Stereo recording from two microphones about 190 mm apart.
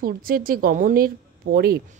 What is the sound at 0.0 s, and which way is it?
A woman's voice, 50° right (ahead or behind).